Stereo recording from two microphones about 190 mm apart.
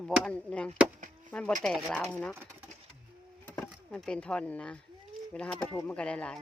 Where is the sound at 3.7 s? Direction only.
5° left (ahead or behind).